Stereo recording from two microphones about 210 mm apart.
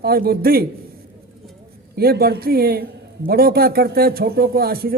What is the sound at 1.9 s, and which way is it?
A man's voice, 45° right (ahead or behind).